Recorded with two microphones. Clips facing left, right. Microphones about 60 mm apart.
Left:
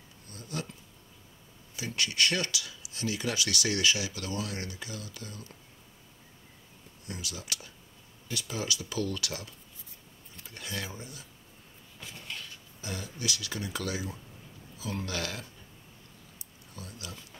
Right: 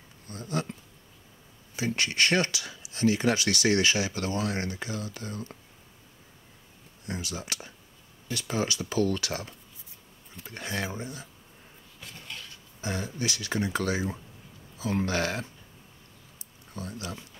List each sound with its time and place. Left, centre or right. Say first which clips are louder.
0.3 s speech: right 6 dB; right
1.8 s speech: right 3 dB; right
7.1 s speech: right 5 dB; right
12.0 s a sound: even; centre
12.8 s speech: right 5 dB; right
16.7 s speech: right 7 dB; right